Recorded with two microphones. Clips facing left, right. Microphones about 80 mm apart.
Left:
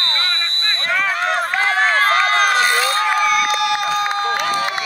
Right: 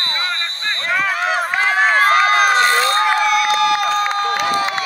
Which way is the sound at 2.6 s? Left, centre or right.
Centre.